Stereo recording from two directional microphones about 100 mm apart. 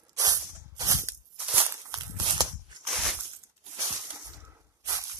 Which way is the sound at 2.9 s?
Centre (ahead or behind).